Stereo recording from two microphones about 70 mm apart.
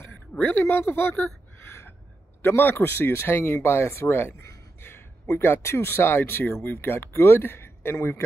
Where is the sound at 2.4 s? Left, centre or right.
Left.